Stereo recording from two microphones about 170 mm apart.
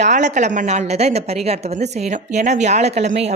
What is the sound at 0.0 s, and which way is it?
Speech, 45° right (ahead or behind).